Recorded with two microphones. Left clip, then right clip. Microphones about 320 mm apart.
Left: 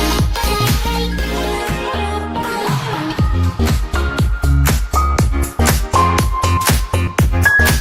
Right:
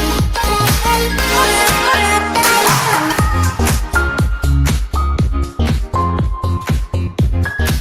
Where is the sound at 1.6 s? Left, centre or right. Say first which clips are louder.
Right 8 dB; right.